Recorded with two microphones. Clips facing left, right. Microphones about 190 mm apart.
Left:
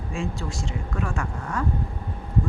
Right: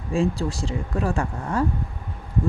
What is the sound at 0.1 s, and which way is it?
Speech, 35° right (ahead or behind).